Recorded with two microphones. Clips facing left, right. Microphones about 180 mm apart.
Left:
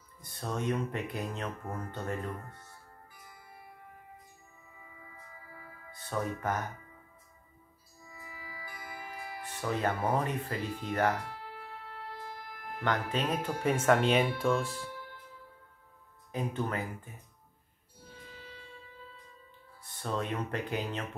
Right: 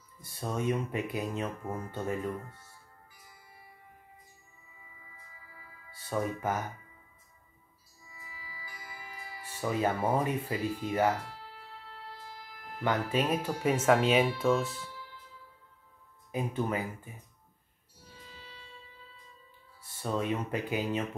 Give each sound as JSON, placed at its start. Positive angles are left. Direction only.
{"t": 0.2, "sound": "speech", "side_deg": -10}
{"t": 3.2, "sound": "tubular bells", "side_deg": 55}
{"t": 4.6, "sound": "music", "side_deg": 55}
{"t": 6.0, "sound": "speech", "side_deg": -10}
{"t": 8.0, "sound": "music", "side_deg": 55}
{"t": 9.6, "sound": "speech", "side_deg": -10}
{"t": 11.2, "sound": "music", "side_deg": 55}
{"t": 12.8, "sound": "speech", "side_deg": -10}
{"t": 14.8, "sound": "music", "side_deg": 55}
{"t": 16.3, "sound": "speech", "side_deg": -10}
{"t": 18.0, "sound": "music", "side_deg": 50}
{"t": 20.0, "sound": "speech", "side_deg": -10}